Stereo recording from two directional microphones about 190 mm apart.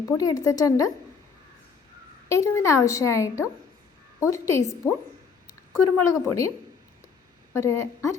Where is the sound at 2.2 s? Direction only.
15° left (ahead or behind).